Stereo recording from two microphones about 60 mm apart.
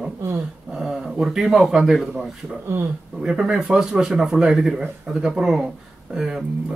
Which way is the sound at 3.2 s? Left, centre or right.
Centre.